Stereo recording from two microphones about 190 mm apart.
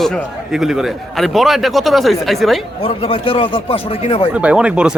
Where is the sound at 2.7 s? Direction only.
30° left (ahead or behind).